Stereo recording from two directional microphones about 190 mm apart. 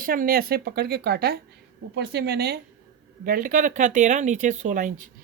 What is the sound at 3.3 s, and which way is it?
Speech, 45° right (ahead or behind).